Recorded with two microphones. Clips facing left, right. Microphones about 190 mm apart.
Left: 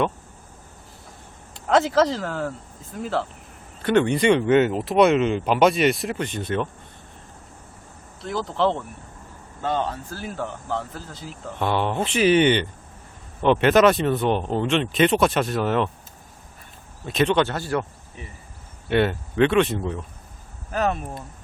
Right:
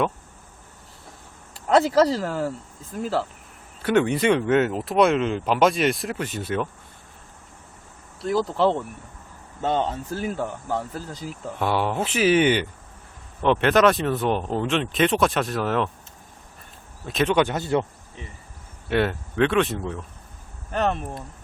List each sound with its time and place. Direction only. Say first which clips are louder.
1.6 s speech: right 1 dB; 5° right (ahead or behind)
8.2 s speech: right 2 dB; 5° right (ahead or behind)
9.6 s speech: right 2 dB; 20° right (ahead or behind); by 15.9 s centre (ahead or behind)
17.1 s speech: left 1 dB; centre (ahead or behind)
17.4 s speech: right 2 dB; 20° right (ahead or behind)
18.9 s speech: left 2 dB; centre (ahead or behind)